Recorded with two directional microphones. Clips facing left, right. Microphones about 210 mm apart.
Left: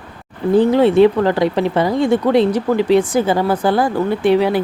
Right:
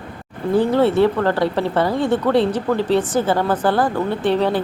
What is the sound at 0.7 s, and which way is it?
Speech, 15° left (ahead or behind).